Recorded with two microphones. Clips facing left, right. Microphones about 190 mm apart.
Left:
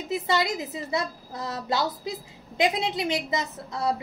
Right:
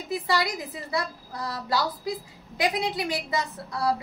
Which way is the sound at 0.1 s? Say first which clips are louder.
Left 1 dB; 25° left (ahead or behind).